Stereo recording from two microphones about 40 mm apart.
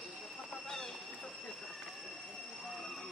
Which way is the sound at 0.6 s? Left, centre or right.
Centre.